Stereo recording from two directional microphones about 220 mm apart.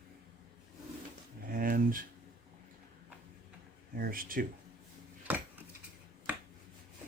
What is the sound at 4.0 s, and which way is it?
Speech, 40° right (ahead or behind).